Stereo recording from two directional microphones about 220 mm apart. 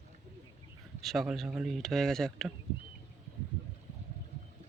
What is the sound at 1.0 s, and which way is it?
Speech, centre (ahead or behind).